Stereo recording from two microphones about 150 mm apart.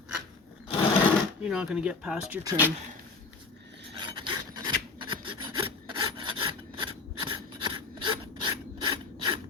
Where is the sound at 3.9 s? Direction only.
35° right (ahead or behind).